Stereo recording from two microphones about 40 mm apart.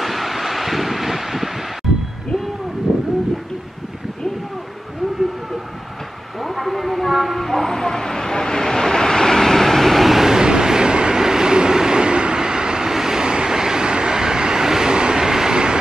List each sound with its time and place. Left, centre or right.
0.0 s wind: centre
6.4 s vehicle: centre
10.2 s train: centre